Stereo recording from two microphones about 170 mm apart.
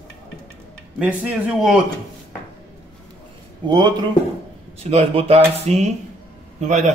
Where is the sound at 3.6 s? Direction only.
25° right (ahead or behind).